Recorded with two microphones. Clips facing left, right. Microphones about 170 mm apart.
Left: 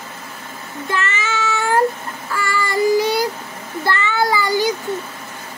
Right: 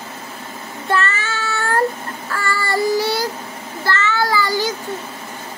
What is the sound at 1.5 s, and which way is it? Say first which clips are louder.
Cat: left 2 dB; 15° left (ahead or behind).